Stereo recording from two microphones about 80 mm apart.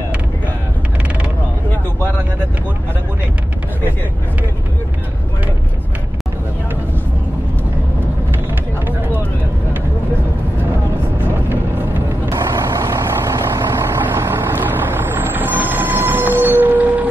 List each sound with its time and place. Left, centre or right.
12.3 s vehicle: right; by 17.1 s centre